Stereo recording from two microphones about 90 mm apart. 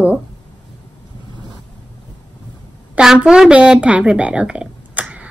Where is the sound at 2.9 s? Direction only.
10° right (ahead or behind).